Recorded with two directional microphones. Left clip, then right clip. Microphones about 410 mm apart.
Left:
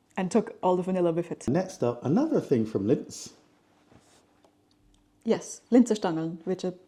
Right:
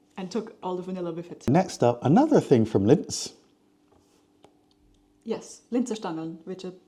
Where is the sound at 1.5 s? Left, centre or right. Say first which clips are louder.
Right 6 dB; right.